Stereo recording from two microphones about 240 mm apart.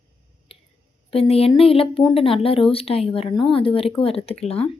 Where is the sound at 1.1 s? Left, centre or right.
Left.